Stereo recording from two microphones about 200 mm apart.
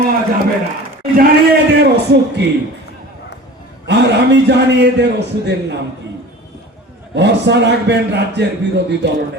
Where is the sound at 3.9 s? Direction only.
60° right (ahead or behind).